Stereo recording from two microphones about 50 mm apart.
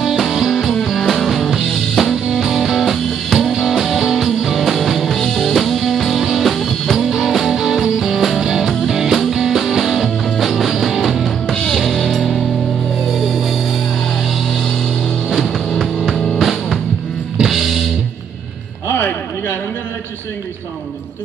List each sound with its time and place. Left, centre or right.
0.0 s music: centre
11.8 s music: centre
15.2 s music: centre
18.9 s a sound: left